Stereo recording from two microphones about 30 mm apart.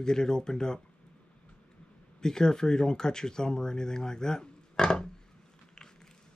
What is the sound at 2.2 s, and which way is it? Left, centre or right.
Speech, left.